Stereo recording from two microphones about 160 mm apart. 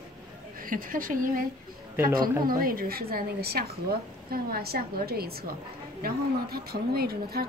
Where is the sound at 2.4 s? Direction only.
65° right (ahead or behind).